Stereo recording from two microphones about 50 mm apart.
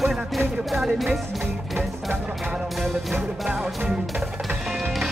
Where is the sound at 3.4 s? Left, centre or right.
Centre.